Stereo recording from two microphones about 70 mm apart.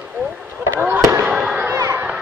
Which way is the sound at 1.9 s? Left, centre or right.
Right.